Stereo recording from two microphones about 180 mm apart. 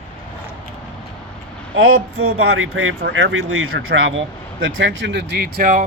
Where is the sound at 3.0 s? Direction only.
75° right (ahead or behind).